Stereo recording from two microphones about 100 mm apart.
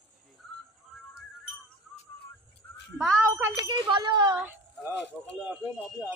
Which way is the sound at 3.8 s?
50° right (ahead or behind).